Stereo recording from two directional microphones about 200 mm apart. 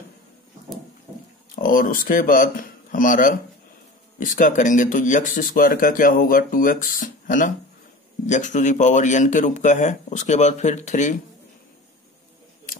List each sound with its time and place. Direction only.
1.5 s speech: 45° left (ahead or behind)
12.7 s scissors: 45° left (ahead or behind)